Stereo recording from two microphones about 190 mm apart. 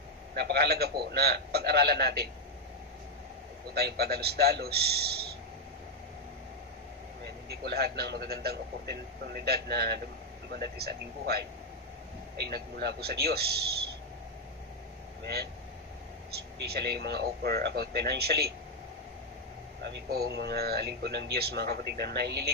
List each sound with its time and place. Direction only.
0.3 s speech: 55° right (ahead or behind)
3.7 s speech: 55° right (ahead or behind)
7.4 s speech: 60° right (ahead or behind)
16.3 s speech: 55° right (ahead or behind)
19.8 s speech: 60° right (ahead or behind)